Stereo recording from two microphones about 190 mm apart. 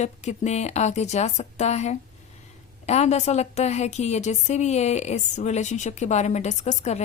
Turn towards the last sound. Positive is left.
turn(degrees=35)  # may be behind; listen again after turning